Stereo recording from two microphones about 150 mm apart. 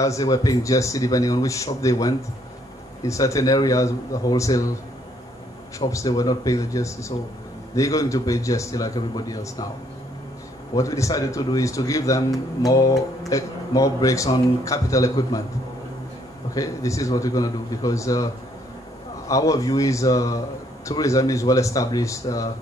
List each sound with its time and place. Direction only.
0.0 s a man's voice: 20° left (ahead or behind)
5.8 s a man's voice: 20° left (ahead or behind)
10.7 s a man's voice: 25° left (ahead or behind)
16.5 s a man's voice: 20° left (ahead or behind)